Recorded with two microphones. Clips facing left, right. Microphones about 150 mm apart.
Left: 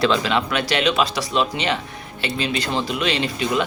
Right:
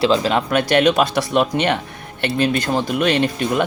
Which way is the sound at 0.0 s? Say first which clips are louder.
Right 3 dB; 35° right (ahead or behind).